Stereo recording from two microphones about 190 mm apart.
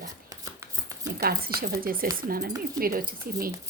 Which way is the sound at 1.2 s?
55° right (ahead or behind).